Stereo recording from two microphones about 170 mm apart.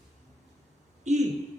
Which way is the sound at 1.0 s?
45° right (ahead or behind).